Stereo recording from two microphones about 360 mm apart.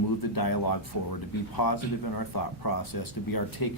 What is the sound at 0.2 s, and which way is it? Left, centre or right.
Speech, left.